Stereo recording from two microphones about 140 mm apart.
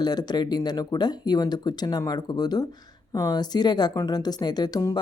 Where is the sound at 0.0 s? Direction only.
30° left (ahead or behind).